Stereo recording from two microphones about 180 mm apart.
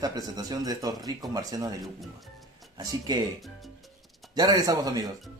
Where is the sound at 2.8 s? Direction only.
20° right (ahead or behind).